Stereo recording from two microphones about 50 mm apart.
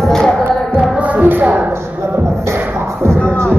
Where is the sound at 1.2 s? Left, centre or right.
Right.